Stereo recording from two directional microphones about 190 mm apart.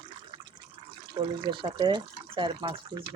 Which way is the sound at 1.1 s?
25° right (ahead or behind).